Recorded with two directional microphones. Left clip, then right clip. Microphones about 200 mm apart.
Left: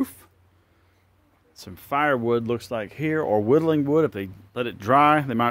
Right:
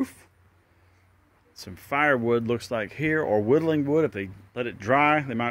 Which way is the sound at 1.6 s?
5° left (ahead or behind).